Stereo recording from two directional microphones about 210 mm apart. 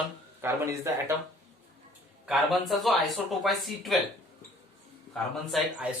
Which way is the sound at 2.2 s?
Centre (ahead or behind).